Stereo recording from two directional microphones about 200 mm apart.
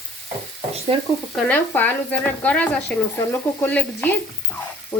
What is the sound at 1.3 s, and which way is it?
Speech, 10° left (ahead or behind).